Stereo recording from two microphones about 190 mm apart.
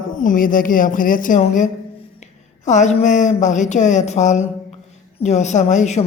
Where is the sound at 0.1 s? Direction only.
45° left (ahead or behind).